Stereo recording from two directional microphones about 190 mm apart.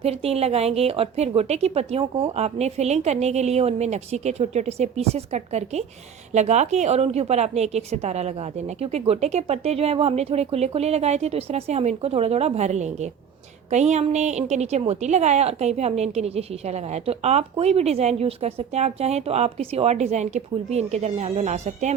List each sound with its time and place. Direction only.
0.0 s a woman's voice: 30° right (ahead or behind)